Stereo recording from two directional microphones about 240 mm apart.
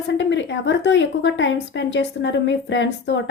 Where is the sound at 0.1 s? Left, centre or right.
Left.